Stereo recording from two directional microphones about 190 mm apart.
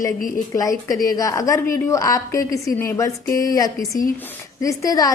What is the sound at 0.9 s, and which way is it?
A woman's voice, 15° left (ahead or behind).